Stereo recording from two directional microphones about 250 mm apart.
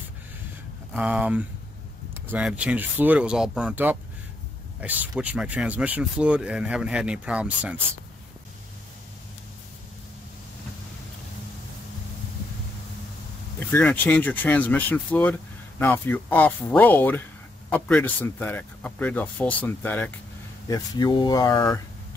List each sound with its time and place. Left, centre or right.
0.9 s speech: centre
13.6 s speech: centre